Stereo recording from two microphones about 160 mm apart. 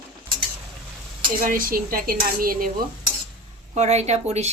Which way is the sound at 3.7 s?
45° right (ahead or behind).